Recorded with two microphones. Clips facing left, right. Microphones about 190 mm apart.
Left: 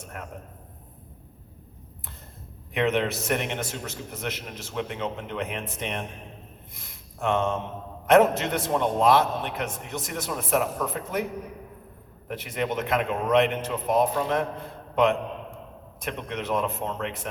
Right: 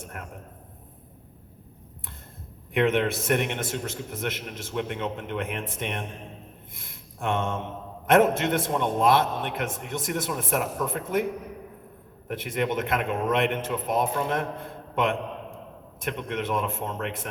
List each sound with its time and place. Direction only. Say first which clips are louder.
2.7 s a man's voice: right 2 dB; 50° right (ahead or behind)
12.3 s a man's voice: right 2 dB; 50° right (ahead or behind)
16.0 s a man's voice: right 2 dB; 50° right (ahead or behind)